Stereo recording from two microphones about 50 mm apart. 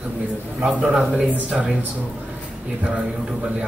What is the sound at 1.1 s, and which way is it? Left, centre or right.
Speech, right.